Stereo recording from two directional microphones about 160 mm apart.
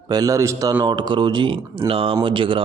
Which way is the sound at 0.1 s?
25° right (ahead or behind).